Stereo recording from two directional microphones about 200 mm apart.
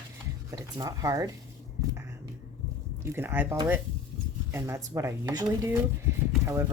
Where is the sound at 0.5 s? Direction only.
15° right (ahead or behind).